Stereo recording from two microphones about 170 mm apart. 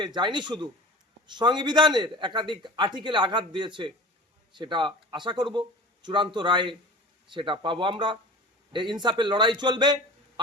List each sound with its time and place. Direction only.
0.0 s a man's voice: 25° right (ahead or behind)